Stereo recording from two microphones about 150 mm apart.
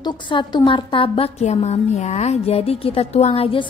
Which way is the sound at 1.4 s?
50° left (ahead or behind).